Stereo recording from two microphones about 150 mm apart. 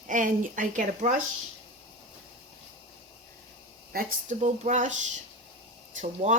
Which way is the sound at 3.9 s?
80° right.